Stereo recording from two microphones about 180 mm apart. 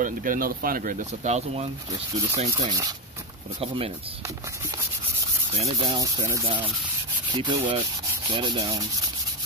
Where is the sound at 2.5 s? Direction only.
20° right (ahead or behind).